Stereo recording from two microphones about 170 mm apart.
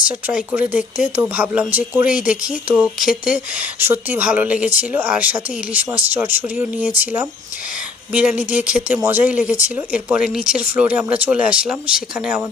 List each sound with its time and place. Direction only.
0.1 s speech: 10° right (ahead or behind)